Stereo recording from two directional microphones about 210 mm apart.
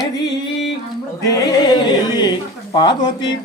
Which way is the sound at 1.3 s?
20° left (ahead or behind).